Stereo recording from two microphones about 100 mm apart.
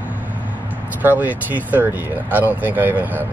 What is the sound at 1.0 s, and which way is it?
Speech, 15° right (ahead or behind).